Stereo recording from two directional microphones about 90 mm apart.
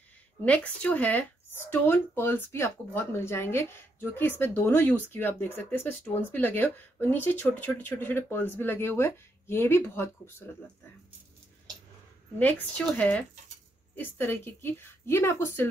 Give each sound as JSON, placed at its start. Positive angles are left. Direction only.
{"t": 0.5, "sound": "speech", "side_deg": 15}
{"t": 12.4, "sound": "a woman's voice", "side_deg": 15}